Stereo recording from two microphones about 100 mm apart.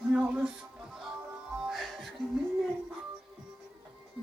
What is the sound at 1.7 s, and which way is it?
Music, centre (ahead or behind).